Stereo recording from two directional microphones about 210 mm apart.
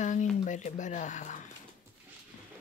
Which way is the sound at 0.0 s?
35° left (ahead or behind).